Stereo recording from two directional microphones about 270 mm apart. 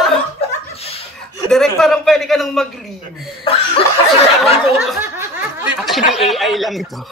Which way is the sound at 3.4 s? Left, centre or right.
Centre.